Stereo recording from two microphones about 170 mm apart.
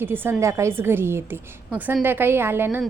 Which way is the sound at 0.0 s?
10° right (ahead or behind).